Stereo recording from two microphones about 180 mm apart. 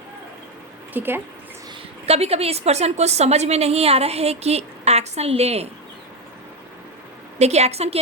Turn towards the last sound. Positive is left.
turn(degrees=-35)  # may be behind; listen again after turning